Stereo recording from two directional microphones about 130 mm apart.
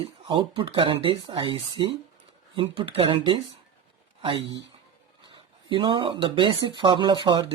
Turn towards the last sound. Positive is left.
turn(degrees=-40)  # may be behind; listen again after turning